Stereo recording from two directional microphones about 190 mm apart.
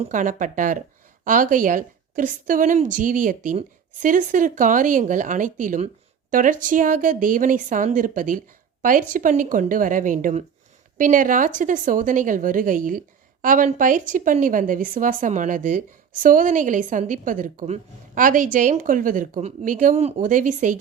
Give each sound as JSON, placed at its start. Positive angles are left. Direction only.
{"t": 0.0, "sound": "speech", "side_deg": -45}